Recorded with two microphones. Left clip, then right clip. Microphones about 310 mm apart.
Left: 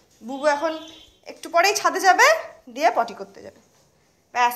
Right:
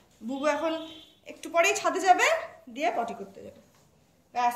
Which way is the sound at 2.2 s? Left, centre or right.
Left.